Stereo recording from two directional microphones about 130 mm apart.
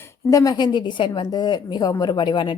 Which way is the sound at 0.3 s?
25° left (ahead or behind).